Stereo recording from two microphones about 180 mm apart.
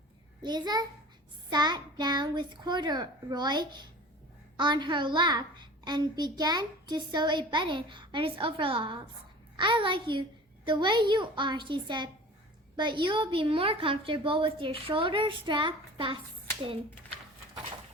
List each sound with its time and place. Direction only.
0.4 s a child's voice: 25° right (ahead or behind)